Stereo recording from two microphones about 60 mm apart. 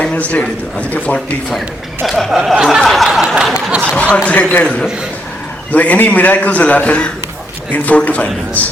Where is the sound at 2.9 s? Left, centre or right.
Centre.